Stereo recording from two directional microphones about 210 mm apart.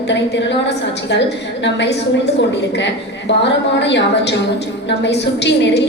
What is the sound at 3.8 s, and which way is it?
Speech, 55° left (ahead or behind).